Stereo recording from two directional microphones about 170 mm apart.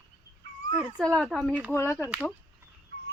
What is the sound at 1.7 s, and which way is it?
Speech, 15° left (ahead or behind).